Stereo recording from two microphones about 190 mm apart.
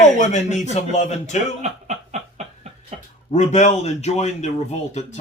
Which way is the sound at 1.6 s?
35° right (ahead or behind).